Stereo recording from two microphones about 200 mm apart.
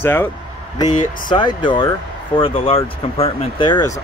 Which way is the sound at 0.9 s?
40° left (ahead or behind).